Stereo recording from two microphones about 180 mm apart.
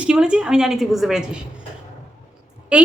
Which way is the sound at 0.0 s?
5° right (ahead or behind).